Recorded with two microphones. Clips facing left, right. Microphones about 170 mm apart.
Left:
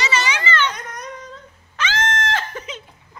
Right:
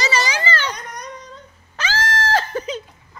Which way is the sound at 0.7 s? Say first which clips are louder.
Even; 5° left (ahead or behind).